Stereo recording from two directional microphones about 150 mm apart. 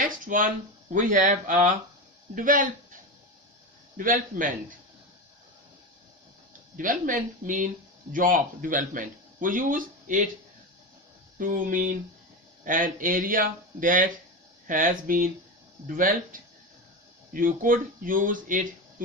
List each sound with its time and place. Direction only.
0.0 s a man's voice: 65° right (ahead or behind)
3.9 s a man's voice: 65° right (ahead or behind)
6.7 s a man's voice: 65° right (ahead or behind)
11.3 s a man's voice: 65° right (ahead or behind)